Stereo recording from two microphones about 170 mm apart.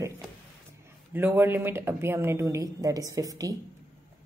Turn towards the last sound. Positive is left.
turn(degrees=-20)  # may be behind; listen again after turning